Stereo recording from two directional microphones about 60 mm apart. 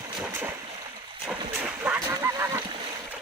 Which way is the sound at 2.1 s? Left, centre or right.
Right.